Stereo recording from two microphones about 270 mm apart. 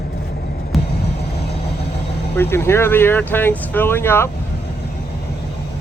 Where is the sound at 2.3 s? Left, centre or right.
Centre.